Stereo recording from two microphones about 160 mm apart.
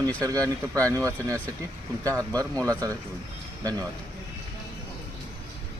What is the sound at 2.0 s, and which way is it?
A man's voice, 20° right (ahead or behind).